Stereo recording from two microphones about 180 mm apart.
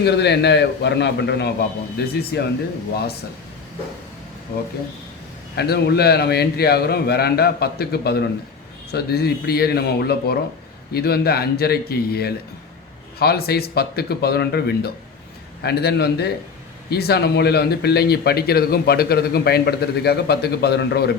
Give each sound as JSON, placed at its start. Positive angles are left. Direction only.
{"t": 0.0, "sound": "a man's voice", "side_deg": 70}
{"t": 5.5, "sound": "speech", "side_deg": 60}